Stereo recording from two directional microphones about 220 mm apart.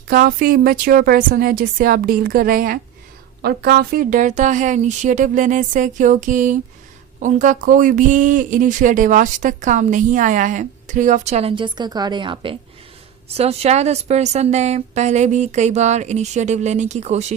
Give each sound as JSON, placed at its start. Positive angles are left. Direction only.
{"t": 0.1, "sound": "speech", "side_deg": -40}